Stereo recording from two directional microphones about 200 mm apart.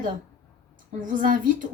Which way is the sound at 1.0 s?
40° right (ahead or behind).